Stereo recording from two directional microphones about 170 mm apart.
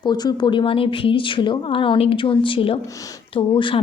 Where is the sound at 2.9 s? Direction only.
20° left (ahead or behind).